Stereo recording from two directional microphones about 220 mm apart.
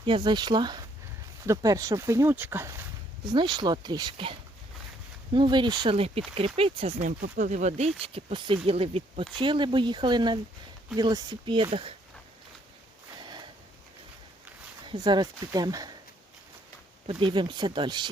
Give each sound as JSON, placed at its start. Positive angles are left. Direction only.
{"t": 0.0, "sound": "speech", "side_deg": -20}
{"t": 14.8, "sound": "speech", "side_deg": -20}
{"t": 17.1, "sound": "speech", "side_deg": -20}